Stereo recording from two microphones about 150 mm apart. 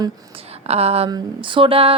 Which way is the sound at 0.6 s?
40° right (ahead or behind).